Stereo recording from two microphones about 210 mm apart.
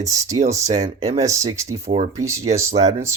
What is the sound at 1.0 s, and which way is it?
Speech, 15° right (ahead or behind).